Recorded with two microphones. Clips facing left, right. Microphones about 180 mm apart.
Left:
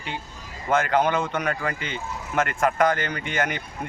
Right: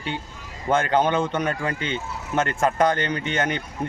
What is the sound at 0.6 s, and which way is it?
Speech, 30° right (ahead or behind).